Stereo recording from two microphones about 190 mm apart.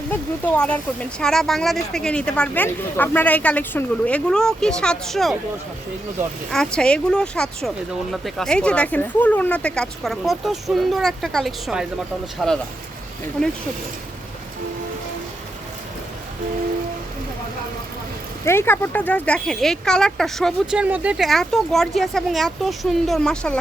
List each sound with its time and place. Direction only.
0.1 s speech: 10° left (ahead or behind)
6.5 s speech: 5° left (ahead or behind)
18.4 s speech: 10° left (ahead or behind)